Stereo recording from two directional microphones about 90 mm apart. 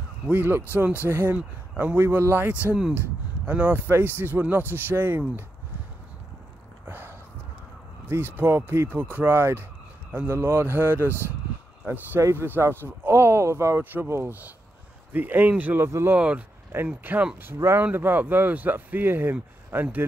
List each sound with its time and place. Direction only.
0.3 s a man's voice: 20° right (ahead or behind)
6.9 s a sound: 25° right (ahead or behind)
8.1 s a man's voice: 25° right (ahead or behind)
16.2 s a man's voice: 15° right (ahead or behind)